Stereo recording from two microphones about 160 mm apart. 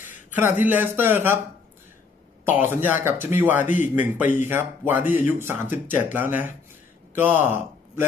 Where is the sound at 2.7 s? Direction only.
15° right (ahead or behind).